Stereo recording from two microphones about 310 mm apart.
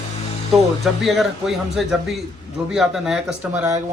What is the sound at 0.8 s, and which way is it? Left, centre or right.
A man's voice, centre.